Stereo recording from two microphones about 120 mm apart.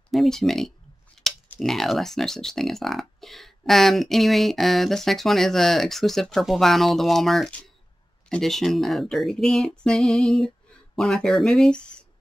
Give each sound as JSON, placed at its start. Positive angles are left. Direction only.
{"t": 0.1, "sound": "speech", "side_deg": 0}